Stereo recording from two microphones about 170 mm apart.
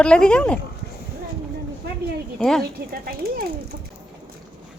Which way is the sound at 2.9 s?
60° right (ahead or behind).